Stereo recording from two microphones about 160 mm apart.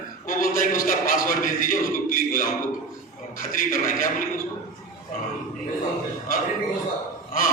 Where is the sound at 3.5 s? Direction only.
60° left (ahead or behind).